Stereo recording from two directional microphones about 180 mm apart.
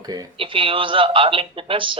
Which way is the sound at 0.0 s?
20° right (ahead or behind).